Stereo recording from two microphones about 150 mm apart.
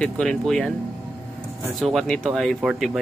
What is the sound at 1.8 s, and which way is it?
Speech, centre (ahead or behind).